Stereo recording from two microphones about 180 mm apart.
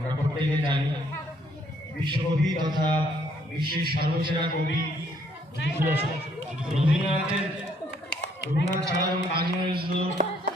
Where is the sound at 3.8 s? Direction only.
55° right (ahead or behind).